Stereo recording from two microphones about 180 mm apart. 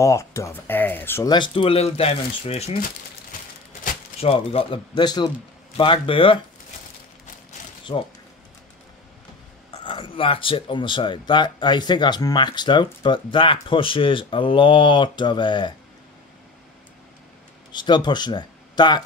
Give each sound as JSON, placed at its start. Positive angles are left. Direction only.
{"t": 0.0, "sound": "speech", "side_deg": 15}
{"t": 1.3, "sound": "speech", "side_deg": 30}
{"t": 4.2, "sound": "speech", "side_deg": 30}
{"t": 7.9, "sound": "speech", "side_deg": 30}
{"t": 9.8, "sound": "speech", "side_deg": 30}
{"t": 17.7, "sound": "speech", "side_deg": 25}